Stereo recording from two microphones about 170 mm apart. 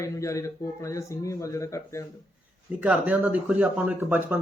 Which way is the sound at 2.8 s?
10° right (ahead or behind).